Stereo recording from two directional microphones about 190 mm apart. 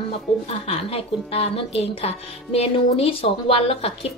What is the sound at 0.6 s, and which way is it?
A woman's voice, 30° left (ahead or behind).